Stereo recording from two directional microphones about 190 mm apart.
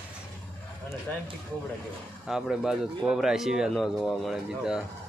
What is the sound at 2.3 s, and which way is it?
Speech, 5° right (ahead or behind).